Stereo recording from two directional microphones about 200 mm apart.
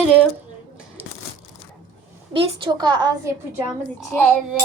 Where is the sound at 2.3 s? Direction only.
25° right (ahead or behind).